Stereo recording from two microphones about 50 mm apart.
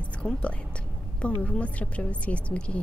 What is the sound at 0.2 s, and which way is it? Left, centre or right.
A woman's voice, left.